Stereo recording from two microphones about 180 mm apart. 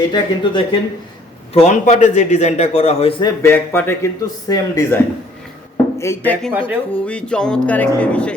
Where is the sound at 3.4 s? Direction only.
10° left (ahead or behind).